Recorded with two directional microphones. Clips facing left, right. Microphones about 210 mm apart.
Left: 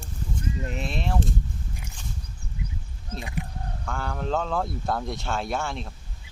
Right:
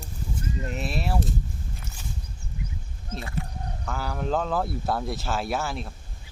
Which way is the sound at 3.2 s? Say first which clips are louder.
Even; 15° left (ahead or behind).